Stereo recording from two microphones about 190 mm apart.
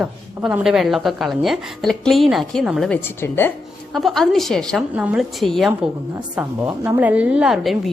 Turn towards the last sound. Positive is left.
turn(degrees=0)  # may be behind; listen again after turning